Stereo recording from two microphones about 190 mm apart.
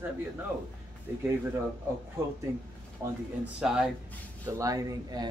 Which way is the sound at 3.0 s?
20° right (ahead or behind).